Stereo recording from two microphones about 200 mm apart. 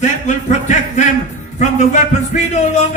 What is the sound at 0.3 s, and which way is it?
Music, 35° left (ahead or behind).